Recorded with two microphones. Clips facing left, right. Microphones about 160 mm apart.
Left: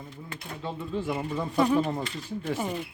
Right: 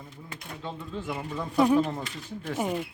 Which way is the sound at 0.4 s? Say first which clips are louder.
Left 3 dB; 5° left (ahead or behind).